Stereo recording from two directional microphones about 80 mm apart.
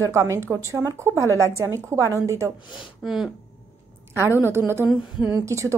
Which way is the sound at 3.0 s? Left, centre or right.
Centre.